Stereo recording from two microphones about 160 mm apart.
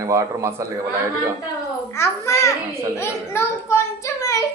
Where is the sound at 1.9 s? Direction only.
15° left (ahead or behind).